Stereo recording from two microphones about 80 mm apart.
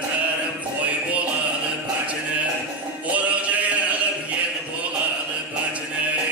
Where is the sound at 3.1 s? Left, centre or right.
Centre.